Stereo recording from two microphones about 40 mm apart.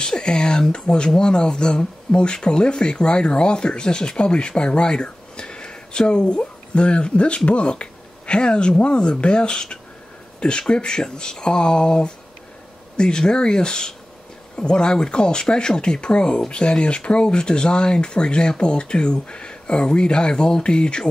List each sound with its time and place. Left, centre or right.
0.0 s speech: centre